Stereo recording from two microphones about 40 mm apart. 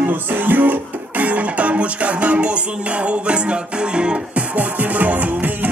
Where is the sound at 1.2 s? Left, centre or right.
Right.